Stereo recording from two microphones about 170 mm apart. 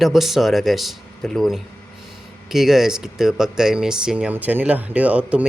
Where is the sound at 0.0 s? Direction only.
Centre (ahead or behind).